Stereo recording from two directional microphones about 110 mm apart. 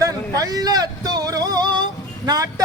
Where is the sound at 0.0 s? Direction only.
35° right (ahead or behind).